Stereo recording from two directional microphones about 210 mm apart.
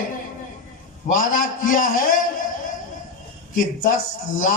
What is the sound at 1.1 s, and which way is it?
Speech, 40° left (ahead or behind).